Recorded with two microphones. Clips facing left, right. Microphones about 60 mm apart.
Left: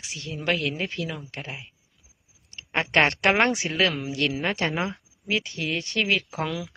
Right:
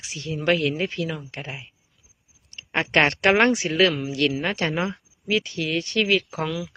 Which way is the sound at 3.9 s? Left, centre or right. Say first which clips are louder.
Right 3 dB; left.